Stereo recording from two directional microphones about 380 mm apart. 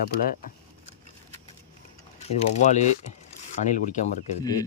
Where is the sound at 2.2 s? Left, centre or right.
Centre.